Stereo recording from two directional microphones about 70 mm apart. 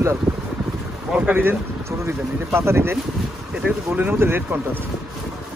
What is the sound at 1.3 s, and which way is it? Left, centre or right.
Speech, right.